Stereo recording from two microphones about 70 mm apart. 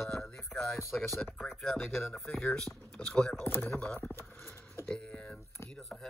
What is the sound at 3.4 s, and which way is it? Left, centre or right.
Speech, left.